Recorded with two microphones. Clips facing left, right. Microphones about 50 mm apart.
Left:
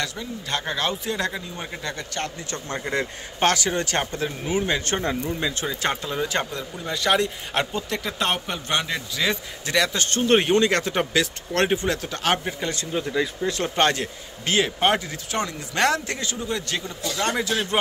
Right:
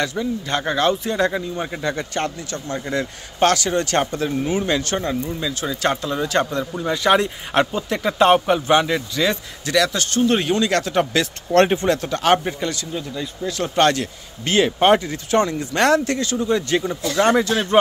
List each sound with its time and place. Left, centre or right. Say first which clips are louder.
0.0 s speech: right 7 dB; centre
2.8 s speech: right 1 dB; left
3.3 s speech: right 4 dB; centre
4.8 s speech: right 2 dB; left
5.7 s speech: right 5 dB; centre
6.9 s speech: right 4 dB; centre
9.7 s speech: right 3 dB; left
10.0 s a man's voice: right 1 dB; left
10.7 s speech: right 4 dB; centre
11.1 s speech: right 8 dB; centre
12.7 s a man's voice: left 3 dB; left
13.7 s speech: right 5 dB; centre
14.4 s speech: right 5 dB; centre
16.4 s speech: right 9 dB; centre